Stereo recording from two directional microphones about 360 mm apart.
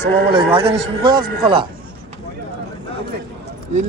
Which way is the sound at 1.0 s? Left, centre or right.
Centre.